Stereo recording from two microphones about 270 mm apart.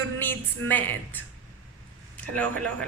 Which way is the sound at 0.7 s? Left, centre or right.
Centre.